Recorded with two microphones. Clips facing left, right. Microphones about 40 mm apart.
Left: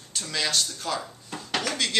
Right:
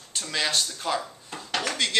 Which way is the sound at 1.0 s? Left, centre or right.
Centre.